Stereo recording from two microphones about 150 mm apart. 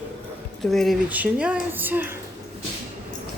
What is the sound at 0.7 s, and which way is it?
Speech, centre (ahead or behind).